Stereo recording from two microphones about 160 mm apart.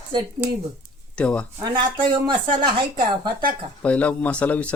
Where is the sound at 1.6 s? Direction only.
25° right (ahead or behind).